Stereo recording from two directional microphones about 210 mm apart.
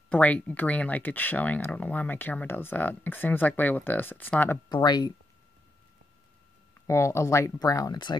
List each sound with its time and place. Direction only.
0.1 s speech: 5° left (ahead or behind)
4.6 s speech: 20° left (ahead or behind)
6.7 s speech: 15° left (ahead or behind)